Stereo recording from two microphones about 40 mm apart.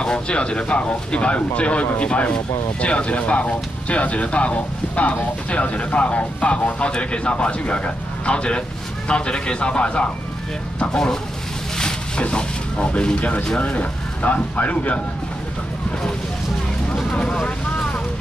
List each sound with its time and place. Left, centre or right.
0.0 s speech: left
10.8 s speech: centre
12.2 s speech: left
16.9 s vehicle: centre
17.2 s vehicle: left